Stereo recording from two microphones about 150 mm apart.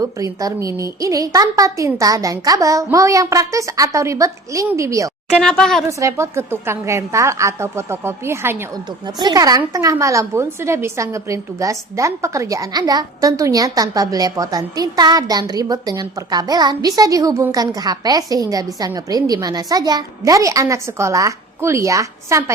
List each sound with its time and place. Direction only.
0.0 s a woman's voice: 25° right (ahead or behind)
5.3 s speech: 5° left (ahead or behind)
6.0 s a woman's voice: 20° right (ahead or behind)
9.0 s a woman's voice: 30° right (ahead or behind)